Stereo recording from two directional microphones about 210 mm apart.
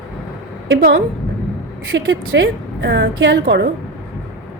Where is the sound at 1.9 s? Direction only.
55° right (ahead or behind).